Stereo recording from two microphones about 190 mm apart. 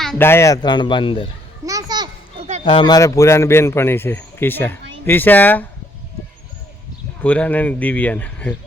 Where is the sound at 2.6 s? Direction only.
25° left (ahead or behind); by 5.6 s 10° left (ahead or behind).